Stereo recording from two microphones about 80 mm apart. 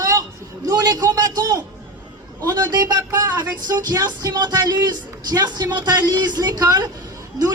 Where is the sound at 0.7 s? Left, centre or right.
Right.